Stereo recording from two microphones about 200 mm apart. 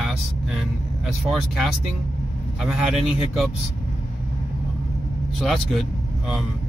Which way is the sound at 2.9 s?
30° left (ahead or behind).